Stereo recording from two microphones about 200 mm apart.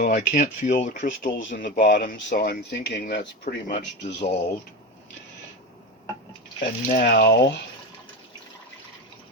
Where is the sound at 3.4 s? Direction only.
40° left (ahead or behind).